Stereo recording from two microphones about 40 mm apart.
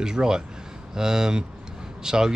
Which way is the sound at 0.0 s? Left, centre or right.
Centre.